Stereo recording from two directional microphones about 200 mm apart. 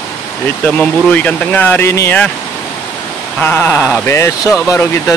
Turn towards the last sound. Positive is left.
turn(degrees=15)  # may be behind; listen again after turning